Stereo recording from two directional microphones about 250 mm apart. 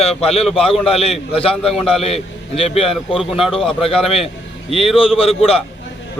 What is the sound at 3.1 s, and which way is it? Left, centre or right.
Speech, centre.